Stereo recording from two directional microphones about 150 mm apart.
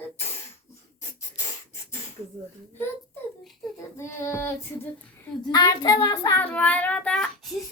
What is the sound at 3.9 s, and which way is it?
Speech, 20° left (ahead or behind).